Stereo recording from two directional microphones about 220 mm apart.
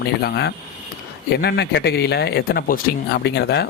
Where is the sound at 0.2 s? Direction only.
45° left (ahead or behind).